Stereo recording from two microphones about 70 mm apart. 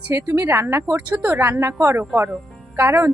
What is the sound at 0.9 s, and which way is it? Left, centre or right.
Speech, right.